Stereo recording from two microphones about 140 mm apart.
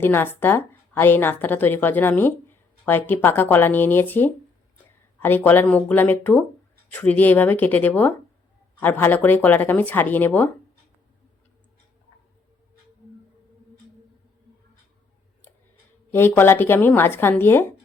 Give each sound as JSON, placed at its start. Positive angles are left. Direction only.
{"t": 0.0, "sound": "a woman's voice", "side_deg": 15}
{"t": 16.1, "sound": "a woman's voice", "side_deg": 15}